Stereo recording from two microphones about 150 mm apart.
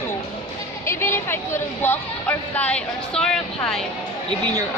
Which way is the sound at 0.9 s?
15° left (ahead or behind).